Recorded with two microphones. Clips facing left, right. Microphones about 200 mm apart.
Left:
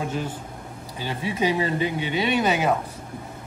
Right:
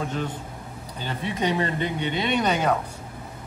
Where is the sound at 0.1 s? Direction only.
10° left (ahead or behind).